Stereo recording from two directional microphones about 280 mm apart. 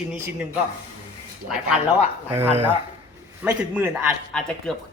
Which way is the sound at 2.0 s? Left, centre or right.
Centre.